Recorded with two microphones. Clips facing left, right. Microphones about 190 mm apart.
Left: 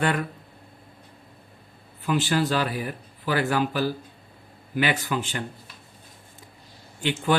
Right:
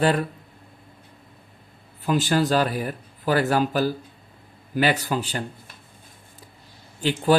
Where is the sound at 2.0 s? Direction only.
40° right (ahead or behind).